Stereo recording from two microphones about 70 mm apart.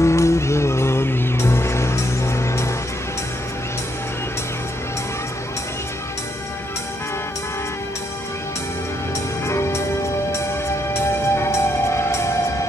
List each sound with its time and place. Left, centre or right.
0.0 s music: left
9.5 s music: left
10.9 s music: left